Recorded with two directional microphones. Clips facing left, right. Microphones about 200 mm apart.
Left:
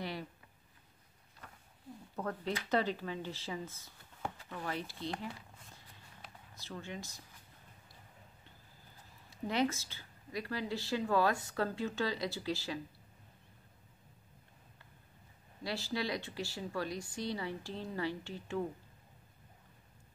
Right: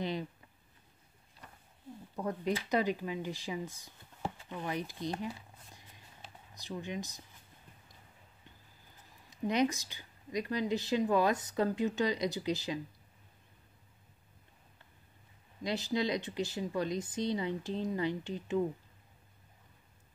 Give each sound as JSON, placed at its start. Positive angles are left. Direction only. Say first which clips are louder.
{"t": 0.0, "sound": "a sound", "louder": "right 5 dB", "side_deg": -20}
{"t": 2.1, "sound": "a woman's voice", "louder": "right 4 dB", "side_deg": -15}
{"t": 6.5, "sound": "a woman's voice", "louder": "right 5 dB", "side_deg": -15}
{"t": 9.3, "sound": "a woman's voice", "louder": "right 3 dB", "side_deg": -20}
{"t": 15.6, "sound": "speech", "louder": "right 5 dB", "side_deg": -20}